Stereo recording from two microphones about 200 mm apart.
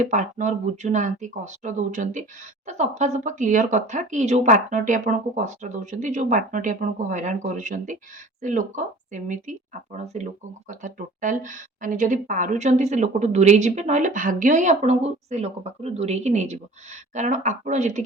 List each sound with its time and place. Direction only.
0.0 s speech: 40° right (ahead or behind)